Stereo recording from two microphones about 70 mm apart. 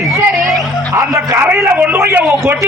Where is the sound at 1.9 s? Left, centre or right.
Right.